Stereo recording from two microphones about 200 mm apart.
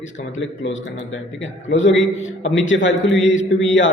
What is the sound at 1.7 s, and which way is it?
A man's voice, 65° left (ahead or behind).